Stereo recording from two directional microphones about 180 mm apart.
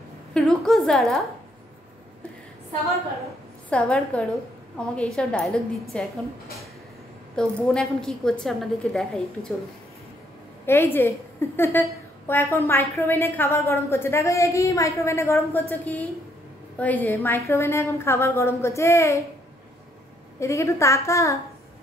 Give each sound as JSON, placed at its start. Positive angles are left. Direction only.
{"t": 0.3, "sound": "a woman's voice", "side_deg": 5}
{"t": 3.7, "sound": "a woman's voice", "side_deg": 5}
{"t": 7.3, "sound": "a woman's voice", "side_deg": 0}
{"t": 10.6, "sound": "a woman's voice", "side_deg": 15}
{"t": 20.3, "sound": "a woman's voice", "side_deg": 15}